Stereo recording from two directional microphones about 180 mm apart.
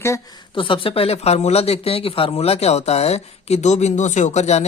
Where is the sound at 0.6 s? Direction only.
30° left (ahead or behind).